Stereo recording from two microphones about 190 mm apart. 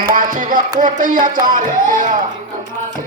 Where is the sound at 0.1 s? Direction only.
45° right (ahead or behind).